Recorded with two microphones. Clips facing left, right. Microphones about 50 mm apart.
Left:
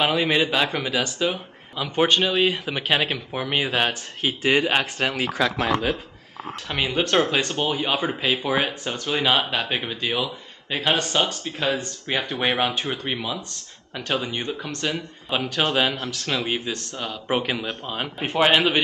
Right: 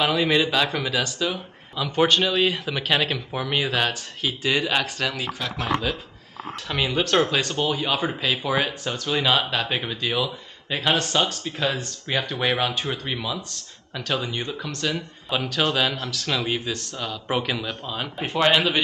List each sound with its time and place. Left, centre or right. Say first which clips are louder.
0.0 s speech: even; centre
3.8 s speech: left 1 dB; left
6.7 s speech: even; centre
12.3 s speech: left 2 dB; centre